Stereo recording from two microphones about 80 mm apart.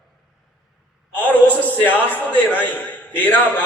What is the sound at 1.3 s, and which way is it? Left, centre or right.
A man's voice, left.